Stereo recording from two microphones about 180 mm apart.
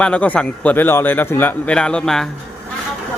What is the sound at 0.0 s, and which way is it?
A man's voice, 10° left (ahead or behind).